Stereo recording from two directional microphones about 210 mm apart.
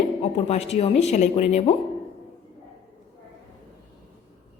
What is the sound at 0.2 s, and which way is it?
Speech, 30° left (ahead or behind).